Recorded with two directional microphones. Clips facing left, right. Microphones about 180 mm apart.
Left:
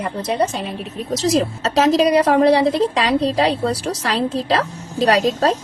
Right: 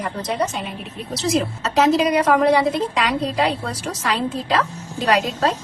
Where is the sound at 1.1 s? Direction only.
40° left (ahead or behind).